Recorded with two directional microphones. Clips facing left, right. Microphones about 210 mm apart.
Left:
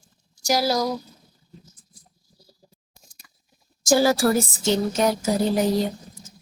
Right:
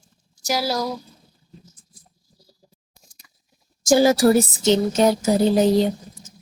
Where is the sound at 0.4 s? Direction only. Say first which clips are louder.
Left 2 dB; 5° right (ahead or behind).